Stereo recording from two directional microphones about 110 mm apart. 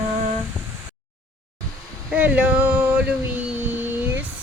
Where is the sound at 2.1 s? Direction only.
10° right (ahead or behind).